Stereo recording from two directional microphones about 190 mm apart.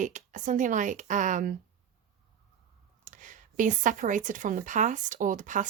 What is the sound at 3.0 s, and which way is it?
Speech, 40° right (ahead or behind).